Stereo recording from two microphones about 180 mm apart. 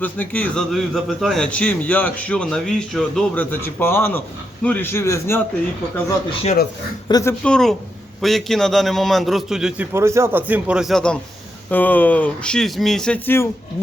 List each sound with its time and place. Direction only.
0.0 s a man's voice: 10° left (ahead or behind)
7.1 s a man's voice: 20° left (ahead or behind)
7.4 s a man's voice: 5° left (ahead or behind)